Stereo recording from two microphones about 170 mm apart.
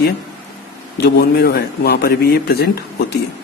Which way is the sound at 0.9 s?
75° left (ahead or behind).